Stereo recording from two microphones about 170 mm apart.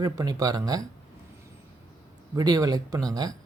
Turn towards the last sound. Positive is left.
turn(degrees=-20)  # may be behind; listen again after turning